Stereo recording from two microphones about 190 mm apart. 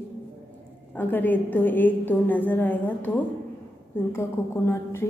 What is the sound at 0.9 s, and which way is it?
A woman's voice, 10° left (ahead or behind).